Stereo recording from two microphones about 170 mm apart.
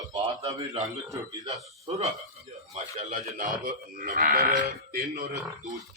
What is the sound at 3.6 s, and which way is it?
Speech, 60° right (ahead or behind).